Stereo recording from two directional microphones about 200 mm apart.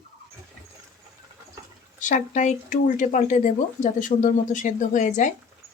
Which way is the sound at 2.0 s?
40° left (ahead or behind).